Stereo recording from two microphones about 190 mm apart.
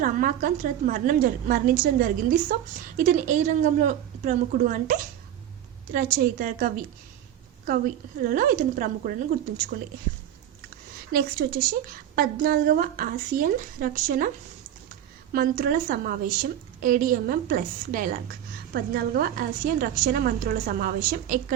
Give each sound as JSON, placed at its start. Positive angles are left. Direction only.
{"t": 0.0, "sound": "a woman's voice", "side_deg": -45}
{"t": 8.2, "sound": "a woman's voice", "side_deg": -45}
{"t": 11.1, "sound": "a woman's voice", "side_deg": -55}
{"t": 15.3, "sound": "a woman's voice", "side_deg": -50}